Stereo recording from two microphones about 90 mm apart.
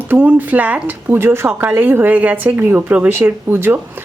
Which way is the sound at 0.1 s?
20° right (ahead or behind).